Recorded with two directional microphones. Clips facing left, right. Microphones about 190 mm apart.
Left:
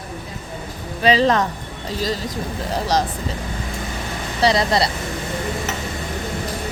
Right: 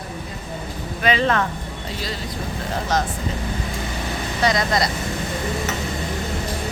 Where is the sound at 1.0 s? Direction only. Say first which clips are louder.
Left 4 dB; 35° left (ahead or behind).